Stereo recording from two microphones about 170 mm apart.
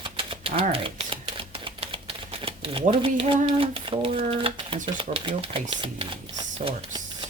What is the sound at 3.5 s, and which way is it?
Speech, 30° right (ahead or behind).